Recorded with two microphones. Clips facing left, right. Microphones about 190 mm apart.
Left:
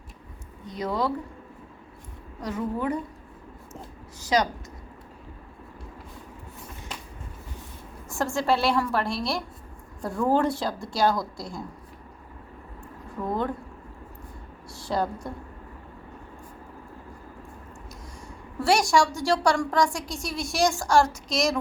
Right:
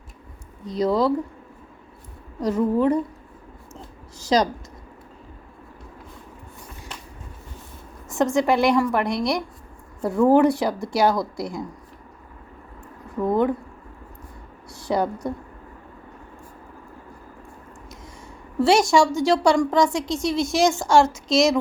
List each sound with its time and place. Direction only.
0.6 s a woman's voice: 35° right (ahead or behind)
2.4 s a woman's voice: 35° right (ahead or behind)
8.1 s a woman's voice: 20° right (ahead or behind)
13.2 s a woman's voice: 20° right (ahead or behind)
14.8 s a woman's voice: 20° right (ahead or behind)
18.6 s a woman's voice: 25° right (ahead or behind)